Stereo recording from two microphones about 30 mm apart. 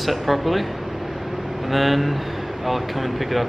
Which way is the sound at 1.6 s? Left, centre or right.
Centre.